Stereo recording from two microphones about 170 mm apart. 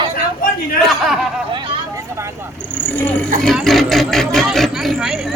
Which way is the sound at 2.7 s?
10° left (ahead or behind).